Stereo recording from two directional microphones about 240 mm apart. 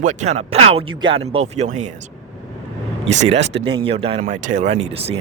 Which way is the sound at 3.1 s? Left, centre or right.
Right.